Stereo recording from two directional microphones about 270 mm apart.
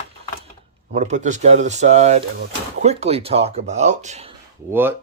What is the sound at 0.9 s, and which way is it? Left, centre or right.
Speech, right.